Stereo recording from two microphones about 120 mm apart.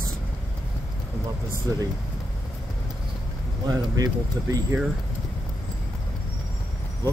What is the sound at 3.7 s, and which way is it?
Speech, 30° right (ahead or behind).